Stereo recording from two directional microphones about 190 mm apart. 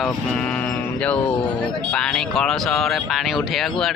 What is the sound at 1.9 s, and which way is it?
Speech, 5° left (ahead or behind).